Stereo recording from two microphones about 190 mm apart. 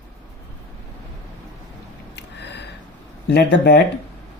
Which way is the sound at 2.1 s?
65° left (ahead or behind).